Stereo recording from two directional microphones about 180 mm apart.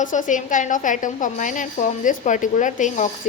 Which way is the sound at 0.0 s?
45° left (ahead or behind).